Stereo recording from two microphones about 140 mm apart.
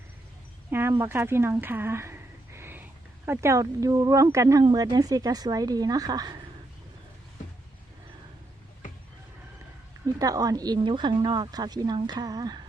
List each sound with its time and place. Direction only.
0.7 s speech: 15° right (ahead or behind)
10.2 s speech: 25° right (ahead or behind)